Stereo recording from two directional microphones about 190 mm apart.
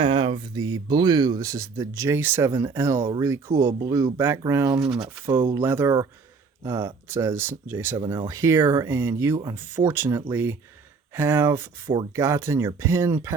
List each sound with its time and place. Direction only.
0.0 s speech: 25° right (ahead or behind)
4.8 s speech: 5° right (ahead or behind)